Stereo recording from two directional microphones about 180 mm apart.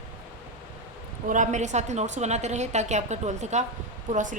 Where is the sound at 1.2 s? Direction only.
45° right (ahead or behind).